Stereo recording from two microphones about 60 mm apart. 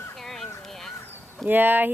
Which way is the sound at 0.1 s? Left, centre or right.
Centre.